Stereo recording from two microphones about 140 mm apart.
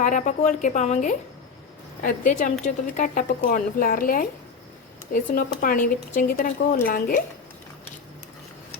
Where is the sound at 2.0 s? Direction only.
75° left (ahead or behind); by 7.2 s 90° left.